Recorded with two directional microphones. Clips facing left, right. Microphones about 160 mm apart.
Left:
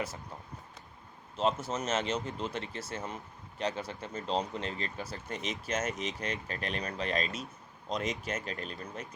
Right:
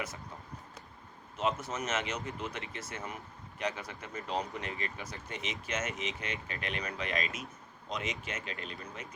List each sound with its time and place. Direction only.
1.4 s speech: 30° left (ahead or behind)